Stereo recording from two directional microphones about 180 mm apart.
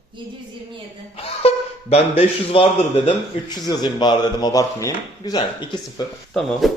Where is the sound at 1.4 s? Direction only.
30° left (ahead or behind).